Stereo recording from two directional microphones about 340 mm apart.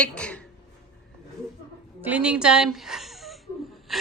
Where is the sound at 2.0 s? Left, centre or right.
Centre.